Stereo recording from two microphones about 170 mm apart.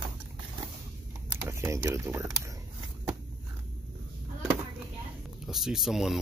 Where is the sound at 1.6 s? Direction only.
15° right (ahead or behind).